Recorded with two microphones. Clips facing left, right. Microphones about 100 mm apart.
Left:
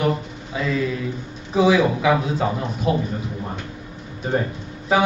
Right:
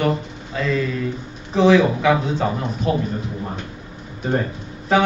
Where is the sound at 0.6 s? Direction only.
5° left (ahead or behind).